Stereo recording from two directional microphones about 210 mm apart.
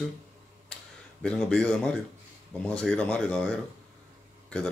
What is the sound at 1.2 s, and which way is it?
Speech, 5° left (ahead or behind).